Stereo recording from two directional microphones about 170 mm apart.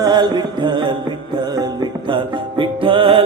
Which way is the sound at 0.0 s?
25° right (ahead or behind).